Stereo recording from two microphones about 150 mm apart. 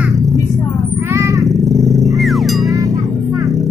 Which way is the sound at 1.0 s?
20° right (ahead or behind).